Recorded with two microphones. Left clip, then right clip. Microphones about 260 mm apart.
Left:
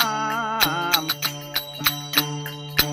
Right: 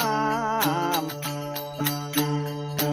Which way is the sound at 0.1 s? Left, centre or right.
Centre.